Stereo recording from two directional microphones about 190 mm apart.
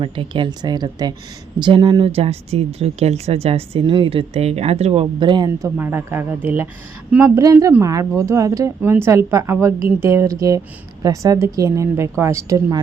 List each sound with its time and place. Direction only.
0.0 s speech: 25° right (ahead or behind)